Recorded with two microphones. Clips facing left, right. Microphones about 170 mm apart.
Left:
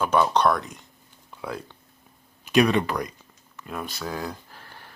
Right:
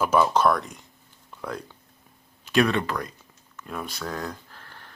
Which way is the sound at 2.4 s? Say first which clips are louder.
Left 2 dB; 15° left (ahead or behind).